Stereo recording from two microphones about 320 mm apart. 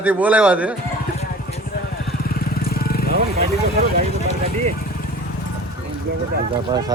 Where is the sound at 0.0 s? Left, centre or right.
Centre.